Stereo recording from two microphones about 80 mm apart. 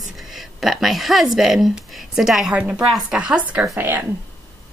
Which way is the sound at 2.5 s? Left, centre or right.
Centre.